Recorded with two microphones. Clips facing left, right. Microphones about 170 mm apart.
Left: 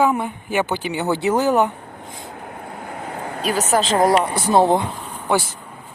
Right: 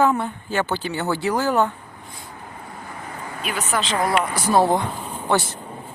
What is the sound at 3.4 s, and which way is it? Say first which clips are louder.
Speech: left 6 dB; 40° left (ahead or behind).